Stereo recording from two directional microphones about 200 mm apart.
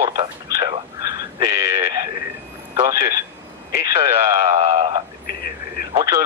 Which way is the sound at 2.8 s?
15° right (ahead or behind).